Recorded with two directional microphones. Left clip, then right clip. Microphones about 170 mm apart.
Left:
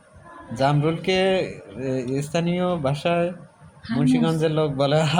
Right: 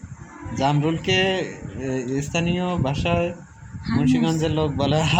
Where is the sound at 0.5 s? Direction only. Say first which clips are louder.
Left 1 dB; 20° left (ahead or behind).